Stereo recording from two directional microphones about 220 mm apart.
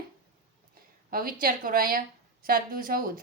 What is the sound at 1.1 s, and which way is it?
A woman's voice, 40° right (ahead or behind).